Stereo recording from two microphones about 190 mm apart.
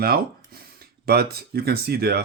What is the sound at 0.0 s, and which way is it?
Speech, 55° right (ahead or behind).